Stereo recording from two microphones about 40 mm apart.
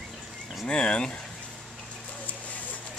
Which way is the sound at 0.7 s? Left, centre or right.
Left.